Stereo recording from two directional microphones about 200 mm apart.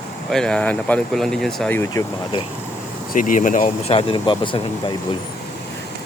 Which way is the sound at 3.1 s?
40° left (ahead or behind).